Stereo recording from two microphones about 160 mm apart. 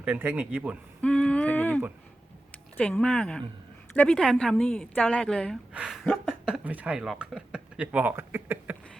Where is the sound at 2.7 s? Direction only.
10° left (ahead or behind); by 8.7 s 10° right (ahead or behind).